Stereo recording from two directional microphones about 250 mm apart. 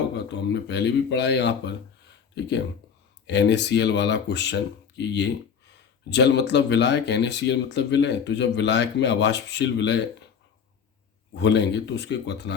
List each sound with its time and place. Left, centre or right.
0.4 s speech: left
3.2 s speech: left
11.3 s speech: left